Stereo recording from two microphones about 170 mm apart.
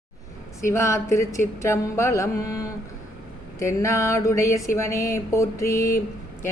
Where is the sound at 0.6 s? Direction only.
15° left (ahead or behind).